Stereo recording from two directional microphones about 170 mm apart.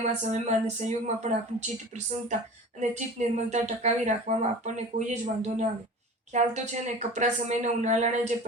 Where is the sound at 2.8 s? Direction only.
45° right (ahead or behind).